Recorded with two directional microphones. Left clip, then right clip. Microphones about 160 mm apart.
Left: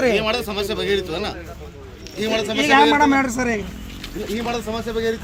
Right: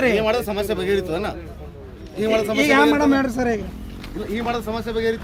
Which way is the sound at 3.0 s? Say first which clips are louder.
Left 2 dB; 45° left (ahead or behind).